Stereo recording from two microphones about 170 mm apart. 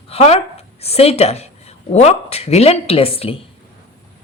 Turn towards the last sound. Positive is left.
turn(degrees=35)  # may be behind; listen again after turning